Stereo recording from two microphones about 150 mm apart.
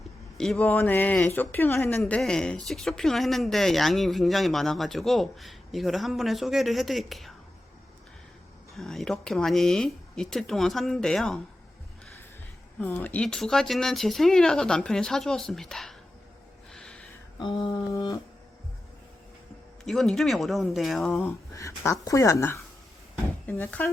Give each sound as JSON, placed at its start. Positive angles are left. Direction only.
{"t": 0.3, "sound": "speech", "side_deg": 5}
{"t": 0.6, "sound": "speech", "side_deg": 15}
{"t": 8.7, "sound": "speech", "side_deg": 0}
{"t": 12.8, "sound": "speech", "side_deg": 10}
{"t": 16.7, "sound": "a sound", "side_deg": 5}
{"t": 17.4, "sound": "speech", "side_deg": 30}
{"t": 19.8, "sound": "speech", "side_deg": 0}
{"t": 21.5, "sound": "speech", "side_deg": 20}